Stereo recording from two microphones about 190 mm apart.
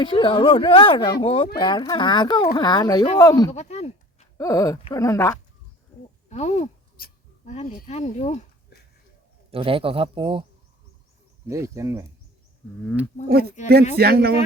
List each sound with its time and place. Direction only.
0.0 s speech: 25° left (ahead or behind)
3.5 s a sound: 35° left (ahead or behind)
4.4 s speech: 20° left (ahead or behind)
6.2 s speech: 35° left (ahead or behind)
6.9 s a sound: 50° left (ahead or behind)
7.5 s speech: 35° left (ahead or behind)
9.5 s speech: 30° right (ahead or behind)
11.4 s speech: 15° right (ahead or behind)
13.9 s a man's voice: 55° right (ahead or behind)